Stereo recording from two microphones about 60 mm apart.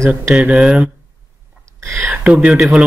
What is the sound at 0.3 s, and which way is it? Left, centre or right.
Speech, centre.